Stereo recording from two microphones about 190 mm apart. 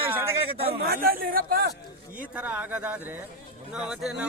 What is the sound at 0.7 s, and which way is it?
A man's voice, 55° right (ahead or behind).